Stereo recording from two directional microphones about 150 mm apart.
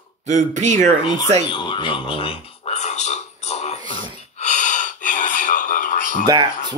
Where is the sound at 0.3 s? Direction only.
55° right (ahead or behind).